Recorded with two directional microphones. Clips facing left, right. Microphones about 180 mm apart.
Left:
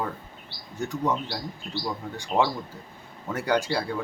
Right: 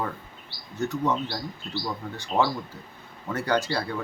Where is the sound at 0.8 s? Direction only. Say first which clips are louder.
Right 1 dB; 15° left (ahead or behind).